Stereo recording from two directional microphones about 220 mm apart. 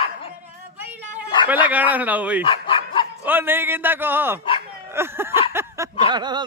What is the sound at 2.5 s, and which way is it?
Dog, 20° left (ahead or behind).